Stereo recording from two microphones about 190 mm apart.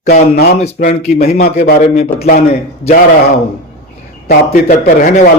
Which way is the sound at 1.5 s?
55° left (ahead or behind).